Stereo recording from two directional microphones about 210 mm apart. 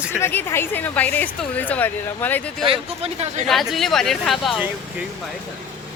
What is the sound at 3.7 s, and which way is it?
Speech, centre (ahead or behind).